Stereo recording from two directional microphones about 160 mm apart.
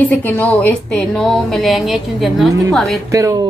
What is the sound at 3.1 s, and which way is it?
Speech, 20° right (ahead or behind).